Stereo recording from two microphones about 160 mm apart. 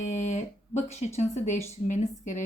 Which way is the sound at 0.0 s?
50° left (ahead or behind).